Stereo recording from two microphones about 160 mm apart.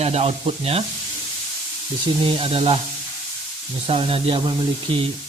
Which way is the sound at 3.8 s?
35° right (ahead or behind).